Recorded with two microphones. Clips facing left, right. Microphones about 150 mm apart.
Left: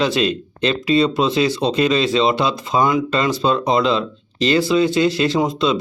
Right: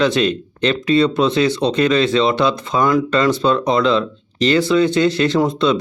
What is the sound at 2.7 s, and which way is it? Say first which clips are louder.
Speech: even; 25° left (ahead or behind).